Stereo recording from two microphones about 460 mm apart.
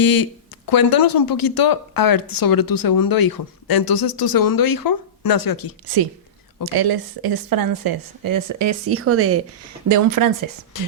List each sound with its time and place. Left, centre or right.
0.0 s speech: left
6.7 s speech: right
9.9 s speech: right
10.7 s speech: left